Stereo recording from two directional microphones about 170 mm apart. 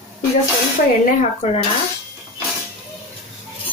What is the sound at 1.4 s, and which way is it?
Speech, 35° left (ahead or behind).